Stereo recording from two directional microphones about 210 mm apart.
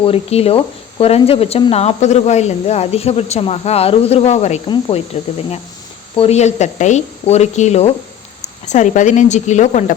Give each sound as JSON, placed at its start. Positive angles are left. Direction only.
{"t": 0.0, "sound": "speech", "side_deg": 30}